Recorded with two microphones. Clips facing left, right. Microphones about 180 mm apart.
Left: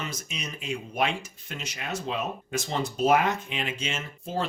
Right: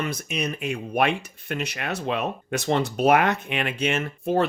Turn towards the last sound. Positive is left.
turn(degrees=-60)  # may be behind; listen again after turning